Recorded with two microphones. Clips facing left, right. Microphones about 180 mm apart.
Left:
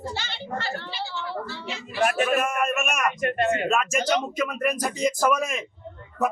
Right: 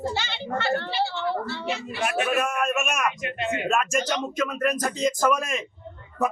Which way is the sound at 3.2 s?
50° left (ahead or behind).